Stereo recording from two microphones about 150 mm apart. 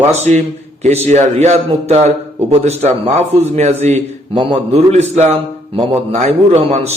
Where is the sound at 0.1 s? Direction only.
50° right (ahead or behind).